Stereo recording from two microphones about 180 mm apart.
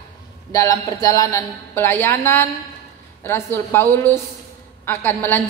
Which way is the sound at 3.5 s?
10° left (ahead or behind).